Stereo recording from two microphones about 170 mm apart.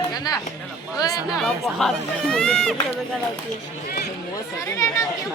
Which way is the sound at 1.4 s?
Centre (ahead or behind).